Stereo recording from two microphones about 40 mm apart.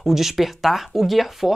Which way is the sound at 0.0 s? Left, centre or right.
Centre.